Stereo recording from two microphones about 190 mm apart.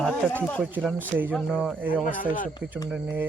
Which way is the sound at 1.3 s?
5° left (ahead or behind).